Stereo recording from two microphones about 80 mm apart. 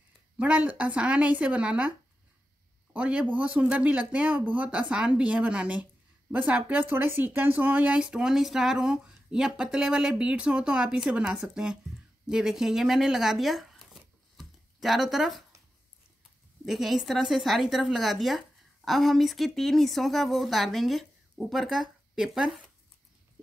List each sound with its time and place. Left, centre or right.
0.4 s a man's voice: centre
16.6 s speech: centre